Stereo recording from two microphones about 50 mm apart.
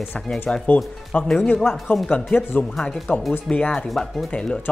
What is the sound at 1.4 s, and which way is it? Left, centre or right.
Speech, left.